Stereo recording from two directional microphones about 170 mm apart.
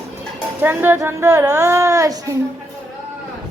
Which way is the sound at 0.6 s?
10° right (ahead or behind).